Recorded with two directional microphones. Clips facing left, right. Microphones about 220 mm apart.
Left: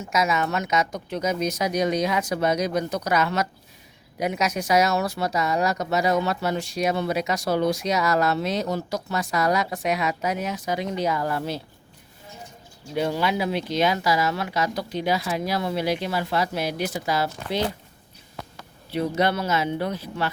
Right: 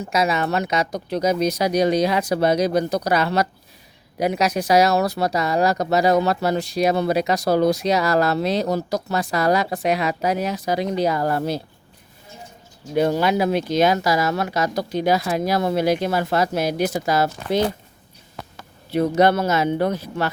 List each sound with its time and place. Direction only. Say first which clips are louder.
0.0 s speech: right 3 dB; 30° right (ahead or behind)
13.0 s speech: right 5 dB; 45° right (ahead or behind)
18.9 s speech: right 6 dB; 45° right (ahead or behind)